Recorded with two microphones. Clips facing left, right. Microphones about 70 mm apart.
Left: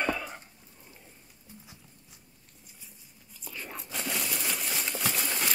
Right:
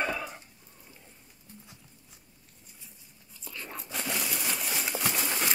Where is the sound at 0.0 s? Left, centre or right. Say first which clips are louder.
Left 1 dB; centre.